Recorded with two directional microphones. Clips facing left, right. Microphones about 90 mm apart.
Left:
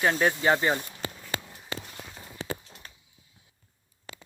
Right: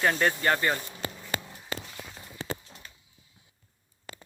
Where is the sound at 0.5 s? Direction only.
20° left (ahead or behind).